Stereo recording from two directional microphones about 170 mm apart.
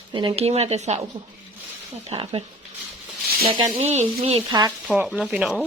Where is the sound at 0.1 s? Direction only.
25° right (ahead or behind).